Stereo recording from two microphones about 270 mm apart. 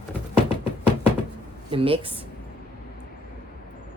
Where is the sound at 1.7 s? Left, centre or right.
Centre.